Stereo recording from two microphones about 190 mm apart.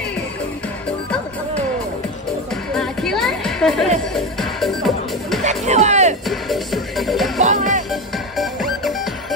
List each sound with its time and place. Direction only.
2.5 s music: centre (ahead or behind)
5.4 s music: 40° right (ahead or behind)
6.2 s music: centre (ahead or behind)
7.3 s music: 40° right (ahead or behind)
7.9 s music: centre (ahead or behind)